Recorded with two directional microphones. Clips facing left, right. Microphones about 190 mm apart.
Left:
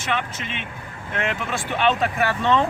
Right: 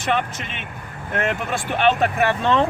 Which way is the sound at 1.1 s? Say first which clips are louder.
Right 3 dB; 45° right (ahead or behind).